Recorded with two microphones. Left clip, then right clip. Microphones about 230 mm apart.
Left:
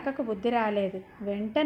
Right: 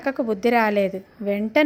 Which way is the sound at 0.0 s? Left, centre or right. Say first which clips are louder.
Right 7 dB; right.